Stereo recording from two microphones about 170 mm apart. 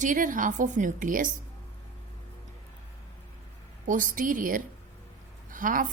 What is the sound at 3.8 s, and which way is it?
A woman's voice, 50° right (ahead or behind).